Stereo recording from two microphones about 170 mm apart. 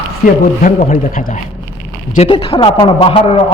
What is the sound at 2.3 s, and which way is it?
Speech, 30° left (ahead or behind).